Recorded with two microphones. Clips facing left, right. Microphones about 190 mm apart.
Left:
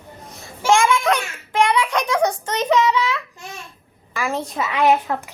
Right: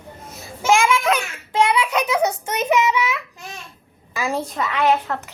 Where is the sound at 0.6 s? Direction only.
5° right (ahead or behind).